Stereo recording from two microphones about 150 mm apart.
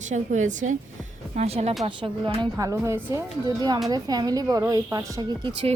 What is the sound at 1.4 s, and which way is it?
Speech, 45° right (ahead or behind).